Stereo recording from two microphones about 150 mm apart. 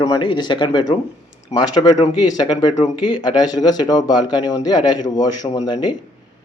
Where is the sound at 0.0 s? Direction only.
30° left (ahead or behind).